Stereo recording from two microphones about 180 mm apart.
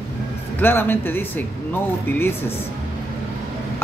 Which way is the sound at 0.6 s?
10° left (ahead or behind).